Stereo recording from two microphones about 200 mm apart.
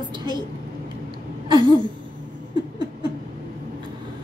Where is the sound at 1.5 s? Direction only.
20° right (ahead or behind).